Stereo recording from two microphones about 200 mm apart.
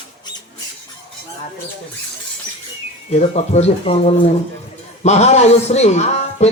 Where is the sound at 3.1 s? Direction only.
35° left (ahead or behind).